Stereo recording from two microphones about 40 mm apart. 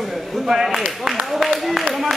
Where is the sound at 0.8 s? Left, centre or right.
Centre.